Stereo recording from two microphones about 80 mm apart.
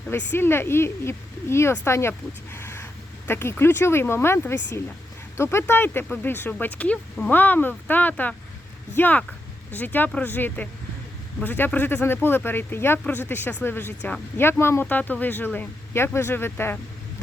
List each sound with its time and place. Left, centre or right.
0.1 s speech: left